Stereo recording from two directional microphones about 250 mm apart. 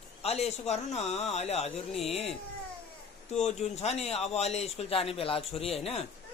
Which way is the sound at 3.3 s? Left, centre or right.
Left.